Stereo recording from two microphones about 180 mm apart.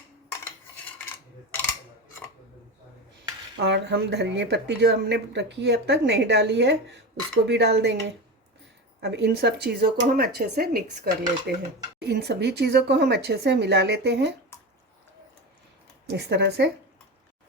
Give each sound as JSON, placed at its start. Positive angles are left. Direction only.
{"t": 3.6, "sound": "speech", "side_deg": -70}
{"t": 16.0, "sound": "speech", "side_deg": -70}